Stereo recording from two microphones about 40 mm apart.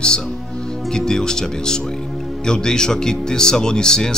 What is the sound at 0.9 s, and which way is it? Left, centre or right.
Speech, centre.